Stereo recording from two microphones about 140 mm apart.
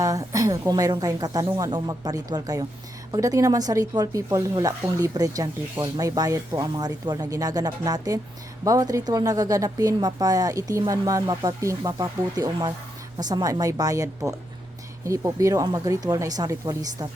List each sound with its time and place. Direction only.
0.0 s speech: 25° right (ahead or behind)